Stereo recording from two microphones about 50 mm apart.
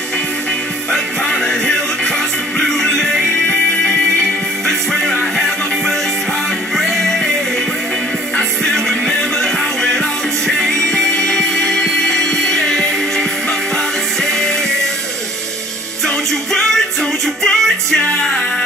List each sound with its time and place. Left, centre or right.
0.9 s music: centre
6.8 s music: centre
8.4 s music: centre
16.5 s music: centre